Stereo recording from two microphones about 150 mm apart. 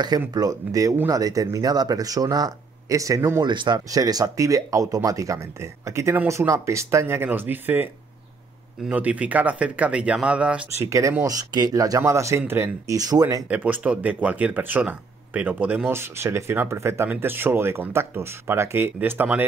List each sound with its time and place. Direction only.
0.3 s speech: 25° right (ahead or behind); by 10.9 s 10° right (ahead or behind)
10.9 s speech: 20° right (ahead or behind)
13.5 s speech: 10° right (ahead or behind)